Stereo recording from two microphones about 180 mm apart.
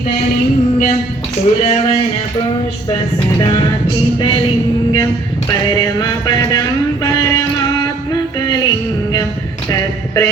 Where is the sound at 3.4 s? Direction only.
25° left (ahead or behind).